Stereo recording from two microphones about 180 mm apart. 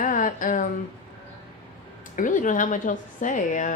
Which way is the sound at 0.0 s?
45° left (ahead or behind).